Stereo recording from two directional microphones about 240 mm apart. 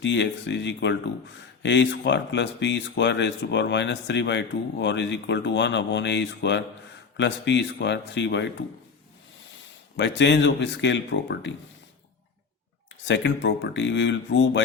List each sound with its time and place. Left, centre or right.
0.0 s speech: left
10.0 s speech: left
13.1 s speech: left